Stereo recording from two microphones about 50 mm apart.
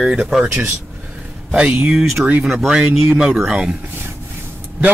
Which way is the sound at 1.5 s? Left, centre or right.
Centre.